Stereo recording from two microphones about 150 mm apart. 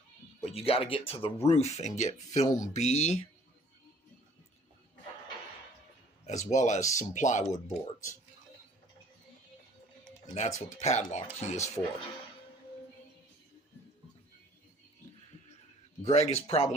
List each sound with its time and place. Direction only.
0.4 s speech: 40° left (ahead or behind)
6.2 s speech: 50° left (ahead or behind)
10.3 s speech: 50° left (ahead or behind)
16.0 s speech: 45° left (ahead or behind)